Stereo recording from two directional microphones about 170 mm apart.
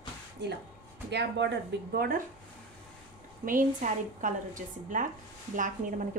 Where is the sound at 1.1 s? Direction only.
90° right; by 2.2 s 65° right (ahead or behind).